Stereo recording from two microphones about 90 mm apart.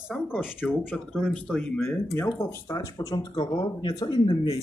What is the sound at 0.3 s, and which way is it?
Speech, 15° left (ahead or behind).